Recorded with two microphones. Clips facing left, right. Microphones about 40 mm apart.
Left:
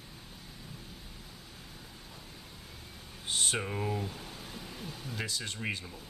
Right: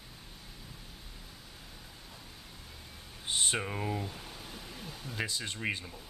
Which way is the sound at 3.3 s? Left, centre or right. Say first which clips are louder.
Even; right.